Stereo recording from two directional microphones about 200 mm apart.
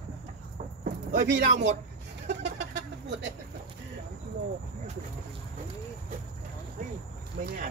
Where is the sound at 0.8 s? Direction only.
40° right (ahead or behind).